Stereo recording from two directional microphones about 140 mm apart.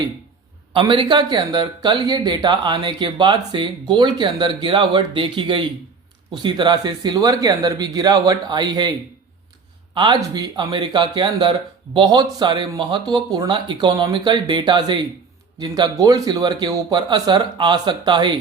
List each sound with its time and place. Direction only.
0.7 s speech: 35° right (ahead or behind)